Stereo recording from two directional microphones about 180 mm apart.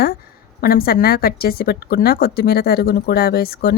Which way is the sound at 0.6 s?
55° left (ahead or behind).